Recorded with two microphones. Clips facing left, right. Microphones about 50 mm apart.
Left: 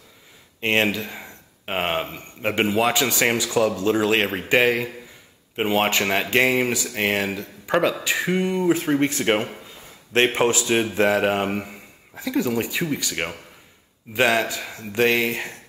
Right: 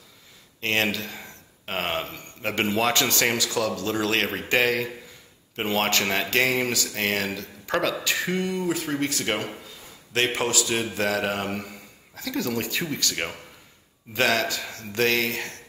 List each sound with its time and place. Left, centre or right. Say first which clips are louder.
0.6 s speech: left 4 dB; left